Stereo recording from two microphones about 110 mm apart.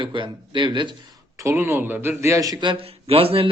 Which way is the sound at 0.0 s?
50° right (ahead or behind).